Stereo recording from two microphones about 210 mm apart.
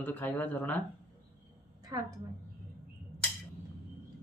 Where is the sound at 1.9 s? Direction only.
15° right (ahead or behind).